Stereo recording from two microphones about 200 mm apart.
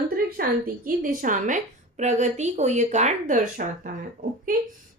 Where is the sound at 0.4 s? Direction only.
50° right (ahead or behind).